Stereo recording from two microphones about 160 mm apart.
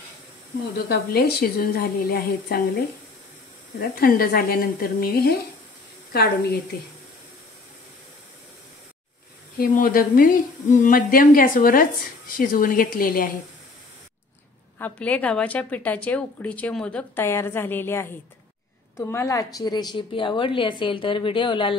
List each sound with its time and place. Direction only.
0.7 s a woman's voice: 80° left
4.0 s a woman's voice: 65° left (ahead or behind)
9.6 s speech: 65° left (ahead or behind)
14.8 s a woman's voice: 10° left (ahead or behind); by 21.7 s 30° left (ahead or behind)